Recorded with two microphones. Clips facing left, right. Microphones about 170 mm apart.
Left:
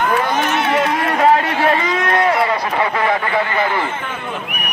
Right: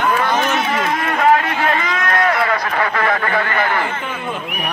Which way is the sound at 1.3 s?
30° left (ahead or behind).